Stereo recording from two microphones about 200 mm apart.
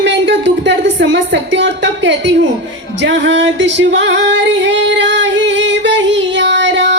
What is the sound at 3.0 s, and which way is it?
Female singing, 65° right (ahead or behind).